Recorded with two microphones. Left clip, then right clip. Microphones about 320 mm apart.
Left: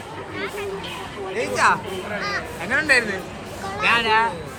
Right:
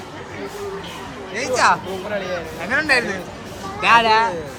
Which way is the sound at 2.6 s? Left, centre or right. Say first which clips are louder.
Right 1 dB; centre.